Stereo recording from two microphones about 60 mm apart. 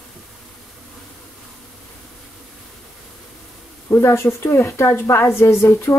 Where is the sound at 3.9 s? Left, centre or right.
Left.